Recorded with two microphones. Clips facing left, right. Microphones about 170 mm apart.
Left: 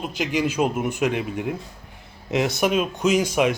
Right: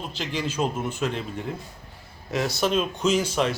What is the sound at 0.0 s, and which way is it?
Speech, 10° left (ahead or behind).